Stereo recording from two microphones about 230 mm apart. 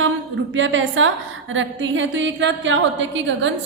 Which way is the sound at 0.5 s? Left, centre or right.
Right.